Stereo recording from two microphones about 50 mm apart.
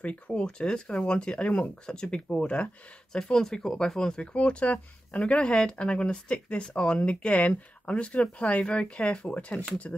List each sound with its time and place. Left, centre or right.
0.0 s speech: left
4.2 s speech: left